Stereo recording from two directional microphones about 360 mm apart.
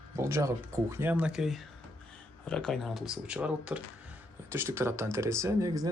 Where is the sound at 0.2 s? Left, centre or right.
Centre.